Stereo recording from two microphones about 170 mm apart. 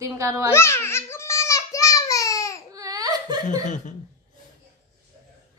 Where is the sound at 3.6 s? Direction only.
45° left (ahead or behind).